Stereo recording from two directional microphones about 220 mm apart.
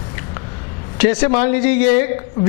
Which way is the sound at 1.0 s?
15° left (ahead or behind).